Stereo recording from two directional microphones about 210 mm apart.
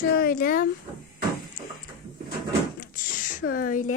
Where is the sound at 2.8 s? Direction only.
40° left (ahead or behind).